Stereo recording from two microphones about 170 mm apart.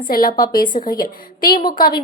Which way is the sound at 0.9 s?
60° left (ahead or behind).